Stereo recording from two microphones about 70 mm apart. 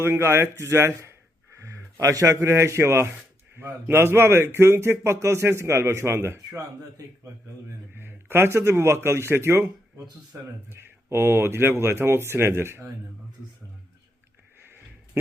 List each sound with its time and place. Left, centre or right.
0.0 s a man's voice: right
7.9 s a man's voice: right